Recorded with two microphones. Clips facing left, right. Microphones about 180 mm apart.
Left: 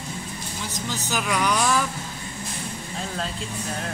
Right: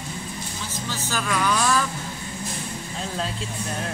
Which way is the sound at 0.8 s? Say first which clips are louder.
Left 1 dB; 15° left (ahead or behind).